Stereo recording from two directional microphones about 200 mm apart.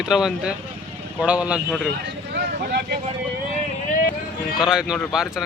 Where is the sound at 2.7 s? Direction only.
55° right (ahead or behind).